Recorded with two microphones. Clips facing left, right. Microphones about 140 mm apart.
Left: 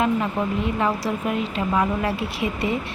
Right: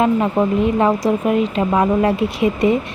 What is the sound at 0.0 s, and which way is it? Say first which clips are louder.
Speech: right 6 dB; 30° right (ahead or behind).